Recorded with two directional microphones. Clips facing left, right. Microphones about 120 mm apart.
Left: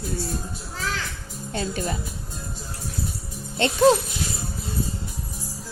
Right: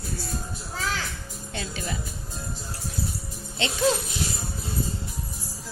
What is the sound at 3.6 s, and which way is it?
Speech, 50° left (ahead or behind).